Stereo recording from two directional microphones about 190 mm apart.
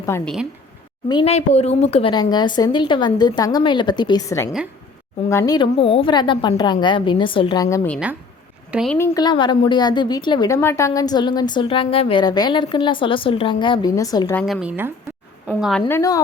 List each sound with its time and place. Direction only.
0.1 s a woman's voice: 15° left (ahead or behind)
1.0 s a woman's voice: 25° left (ahead or behind)
7.9 s a woman's voice: centre (ahead or behind)
9.0 s a woman's voice: 15° left (ahead or behind)
14.3 s speech: centre (ahead or behind)
15.9 s a woman's voice: 15° left (ahead or behind)